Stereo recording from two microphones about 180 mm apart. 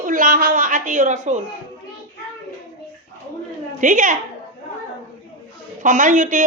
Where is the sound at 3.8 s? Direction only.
45° right (ahead or behind).